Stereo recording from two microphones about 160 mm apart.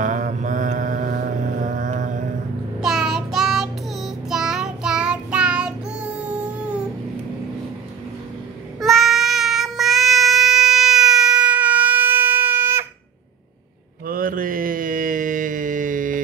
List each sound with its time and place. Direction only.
0.0 s mantra: 50° right (ahead or behind)
2.8 s child singing: 5° right (ahead or behind)
8.7 s child singing: centre (ahead or behind)
14.0 s mantra: 60° right (ahead or behind)